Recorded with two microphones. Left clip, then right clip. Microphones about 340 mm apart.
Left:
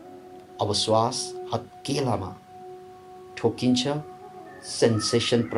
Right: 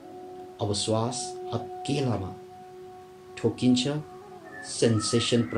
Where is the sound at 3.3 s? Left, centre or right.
Centre.